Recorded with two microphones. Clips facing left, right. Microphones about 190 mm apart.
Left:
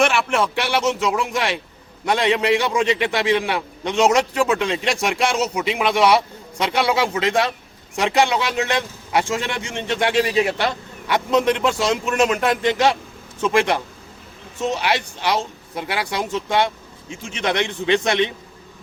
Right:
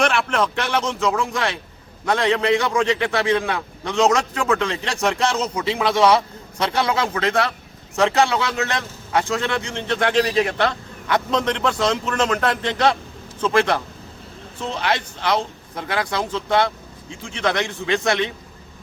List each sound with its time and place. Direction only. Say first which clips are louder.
0.0 s a man's voice: left 1 dB; 5° left (ahead or behind)
14.8 s a man's voice: left 1 dB; 10° left (ahead or behind)